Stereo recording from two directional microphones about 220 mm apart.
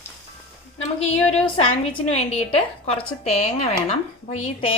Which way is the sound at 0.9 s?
25° left (ahead or behind).